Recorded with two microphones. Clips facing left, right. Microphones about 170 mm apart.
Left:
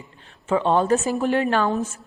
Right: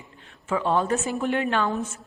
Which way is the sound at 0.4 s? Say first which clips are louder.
Left 4 dB; 30° left (ahead or behind).